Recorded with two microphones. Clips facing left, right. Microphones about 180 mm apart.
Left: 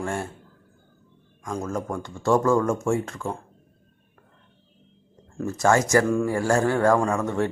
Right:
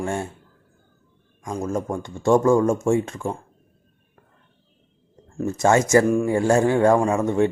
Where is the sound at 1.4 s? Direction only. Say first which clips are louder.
Right 3 dB; 20° right (ahead or behind).